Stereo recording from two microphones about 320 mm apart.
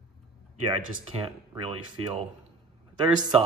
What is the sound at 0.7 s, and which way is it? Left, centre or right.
Speech, centre.